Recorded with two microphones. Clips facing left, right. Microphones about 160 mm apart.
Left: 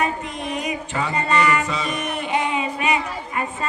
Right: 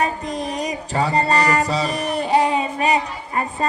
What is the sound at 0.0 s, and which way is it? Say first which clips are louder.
Music: right 2 dB; 35° right (ahead or behind).